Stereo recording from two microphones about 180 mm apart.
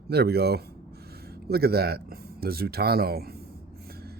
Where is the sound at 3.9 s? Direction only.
60° right (ahead or behind).